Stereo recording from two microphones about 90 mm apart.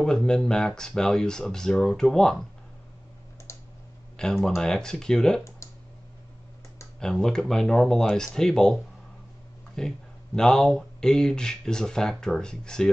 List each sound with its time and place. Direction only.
0.0 s speech: 5° left (ahead or behind)
3.5 s computer keyboard: 35° left (ahead or behind)
4.2 s speech: 5° left (ahead or behind)
7.0 s speech: 5° left (ahead or behind)
9.8 s speech: 5° left (ahead or behind)